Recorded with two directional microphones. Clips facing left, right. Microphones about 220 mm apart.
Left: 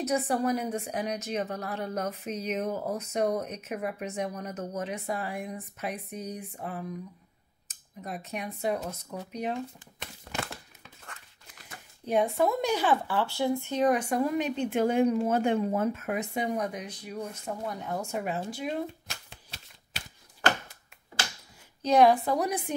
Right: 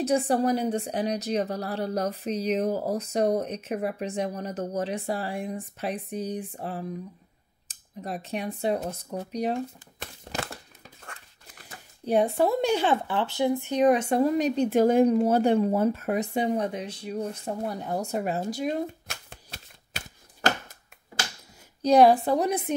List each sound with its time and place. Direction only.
0.0 s a woman's voice: 30° right (ahead or behind)
9.3 s crumpling: 40° right (ahead or behind)
12.1 s a woman's voice: 30° right (ahead or behind)
19.0 s shuffling cards: 50° right (ahead or behind)
21.8 s a woman's voice: 35° right (ahead or behind)